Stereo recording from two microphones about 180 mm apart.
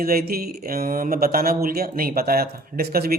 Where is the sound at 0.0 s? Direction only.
55° right (ahead or behind).